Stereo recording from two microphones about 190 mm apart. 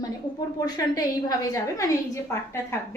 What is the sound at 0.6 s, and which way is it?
A woman's voice, 20° left (ahead or behind).